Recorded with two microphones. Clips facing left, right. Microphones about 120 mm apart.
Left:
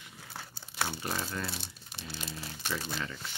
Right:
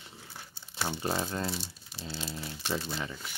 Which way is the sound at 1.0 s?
25° right (ahead or behind).